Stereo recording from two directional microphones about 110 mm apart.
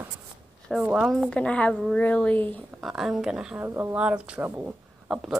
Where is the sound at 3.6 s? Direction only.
20° right (ahead or behind).